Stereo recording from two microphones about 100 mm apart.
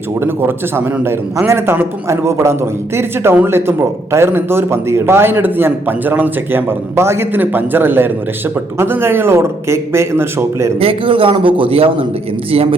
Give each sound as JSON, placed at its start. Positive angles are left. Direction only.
{"t": 0.2, "sound": "a man's voice", "side_deg": -20}
{"t": 10.8, "sound": "a man's voice", "side_deg": -65}